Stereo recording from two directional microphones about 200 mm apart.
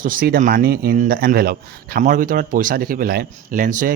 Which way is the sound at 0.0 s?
45° right (ahead or behind).